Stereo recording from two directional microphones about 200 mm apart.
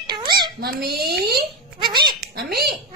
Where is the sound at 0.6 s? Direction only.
50° right (ahead or behind).